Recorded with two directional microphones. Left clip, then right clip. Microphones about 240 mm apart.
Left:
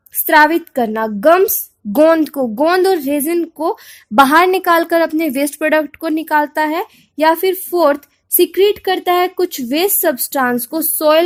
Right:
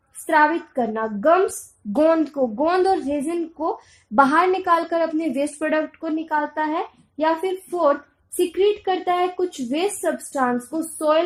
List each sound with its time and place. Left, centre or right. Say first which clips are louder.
0.3 s a woman's voice: left 7 dB; left